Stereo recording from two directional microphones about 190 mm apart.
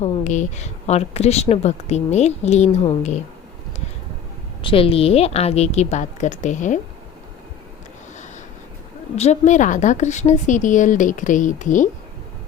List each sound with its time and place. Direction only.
0.0 s speech: 35° left (ahead or behind)
4.6 s speech: 30° left (ahead or behind)
9.1 s speech: 35° left (ahead or behind)